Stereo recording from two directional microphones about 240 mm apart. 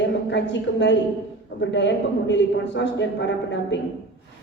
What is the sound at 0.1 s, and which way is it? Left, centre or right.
A woman's voice, left.